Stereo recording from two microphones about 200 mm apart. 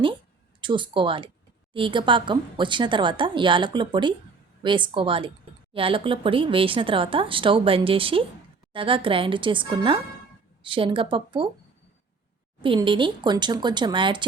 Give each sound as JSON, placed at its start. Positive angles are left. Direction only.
{"t": 0.6, "sound": "speech", "side_deg": -25}
{"t": 12.6, "sound": "speech", "side_deg": -25}